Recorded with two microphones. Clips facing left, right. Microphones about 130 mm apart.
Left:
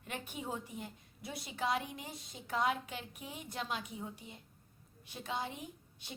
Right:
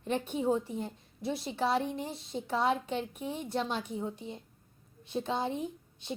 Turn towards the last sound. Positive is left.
turn(degrees=-25)  # may be behind; listen again after turning